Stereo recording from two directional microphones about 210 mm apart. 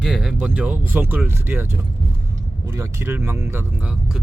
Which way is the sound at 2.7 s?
10° right (ahead or behind).